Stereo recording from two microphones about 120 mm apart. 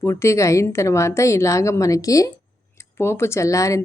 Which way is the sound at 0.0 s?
20° left (ahead or behind).